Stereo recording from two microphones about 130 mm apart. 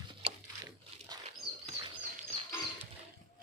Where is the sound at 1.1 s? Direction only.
35° right (ahead or behind).